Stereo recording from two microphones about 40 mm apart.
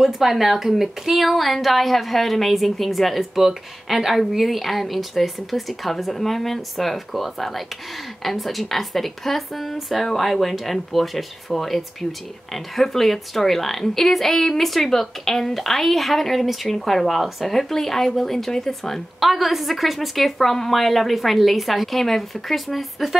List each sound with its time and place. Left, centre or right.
0.0 s a woman's voice: centre